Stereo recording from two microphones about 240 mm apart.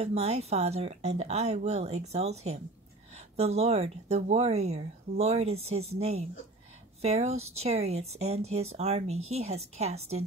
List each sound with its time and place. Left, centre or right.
0.0 s speech: right